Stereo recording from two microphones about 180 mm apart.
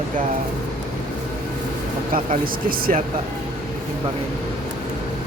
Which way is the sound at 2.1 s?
50° right (ahead or behind).